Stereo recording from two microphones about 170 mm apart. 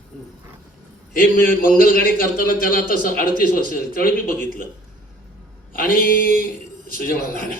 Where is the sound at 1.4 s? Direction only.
55° left (ahead or behind).